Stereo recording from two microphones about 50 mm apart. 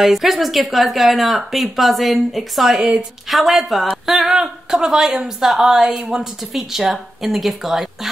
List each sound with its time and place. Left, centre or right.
0.0 s speech: centre
2.8 s a woman's voice: centre
3.3 s speech: centre
4.0 s a sound: centre
5.4 s speech: centre